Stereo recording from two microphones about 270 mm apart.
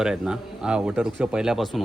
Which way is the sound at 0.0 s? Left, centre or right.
Centre.